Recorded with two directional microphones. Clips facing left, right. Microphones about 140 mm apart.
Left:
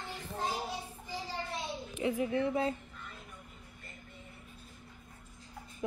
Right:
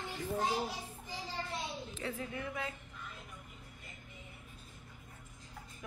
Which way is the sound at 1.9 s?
15° left (ahead or behind).